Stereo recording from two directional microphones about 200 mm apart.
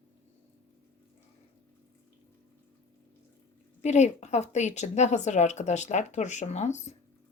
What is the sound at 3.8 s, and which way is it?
A woman's voice, 35° left (ahead or behind).